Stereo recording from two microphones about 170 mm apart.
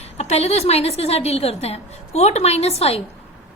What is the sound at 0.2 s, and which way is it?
A woman's voice, 40° left (ahead or behind).